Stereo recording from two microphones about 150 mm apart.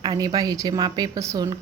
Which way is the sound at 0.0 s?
30° right (ahead or behind).